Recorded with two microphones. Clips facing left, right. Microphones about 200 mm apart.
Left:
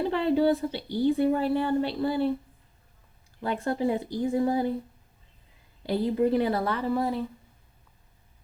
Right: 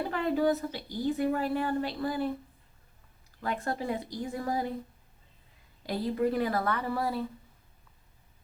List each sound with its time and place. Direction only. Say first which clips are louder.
0.1 s a woman's voice: left 3 dB; 30° left (ahead or behind)
3.4 s speech: left 5 dB; 30° left (ahead or behind)
5.8 s a woman's voice: left 4 dB; 30° left (ahead or behind)